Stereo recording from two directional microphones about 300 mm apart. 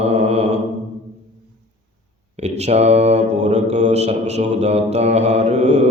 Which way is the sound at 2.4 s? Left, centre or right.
Right.